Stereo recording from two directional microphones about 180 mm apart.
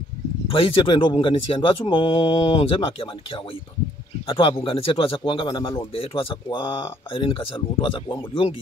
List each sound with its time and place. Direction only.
0.5 s speech: 30° left (ahead or behind)